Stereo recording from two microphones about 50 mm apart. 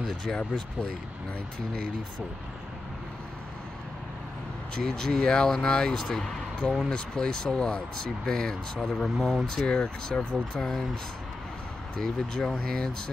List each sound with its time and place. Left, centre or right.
0.0 s speech: centre
4.7 s speech: centre
10.5 s speech: centre
12.0 s speech: centre